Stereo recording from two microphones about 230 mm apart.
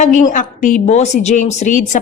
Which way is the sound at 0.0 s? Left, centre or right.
Left.